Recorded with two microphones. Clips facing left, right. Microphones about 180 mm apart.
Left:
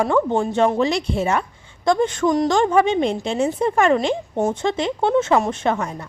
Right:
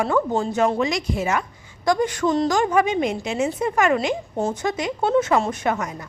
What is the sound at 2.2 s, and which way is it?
Speech, 15° left (ahead or behind).